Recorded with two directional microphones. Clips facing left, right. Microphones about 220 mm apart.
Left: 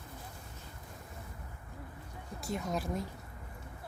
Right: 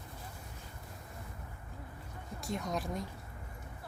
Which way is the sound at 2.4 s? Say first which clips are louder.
Left 1 dB; centre (ahead or behind).